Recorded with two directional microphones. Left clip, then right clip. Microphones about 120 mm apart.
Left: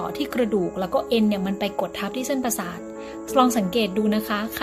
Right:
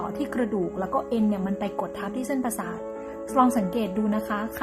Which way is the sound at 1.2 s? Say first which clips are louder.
Left 4 dB; 15° left (ahead or behind).